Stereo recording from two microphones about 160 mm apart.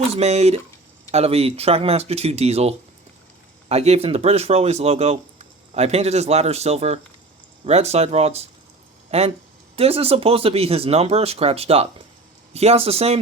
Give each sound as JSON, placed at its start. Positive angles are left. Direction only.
{"t": 0.1, "sound": "speech", "side_deg": -40}